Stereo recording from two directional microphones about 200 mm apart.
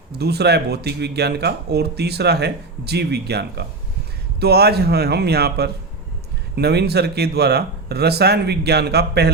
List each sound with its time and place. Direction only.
0.1 s speech: 55° right (ahead or behind)